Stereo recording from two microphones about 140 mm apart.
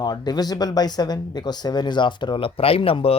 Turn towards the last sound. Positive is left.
turn(degrees=40)  # may be behind; listen again after turning